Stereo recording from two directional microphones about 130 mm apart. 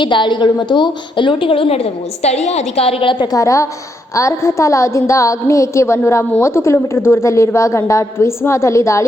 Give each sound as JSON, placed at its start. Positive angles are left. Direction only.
{"t": 0.0, "sound": "a woman's voice", "side_deg": 40}
{"t": 3.3, "sound": "a woman's voice", "side_deg": 25}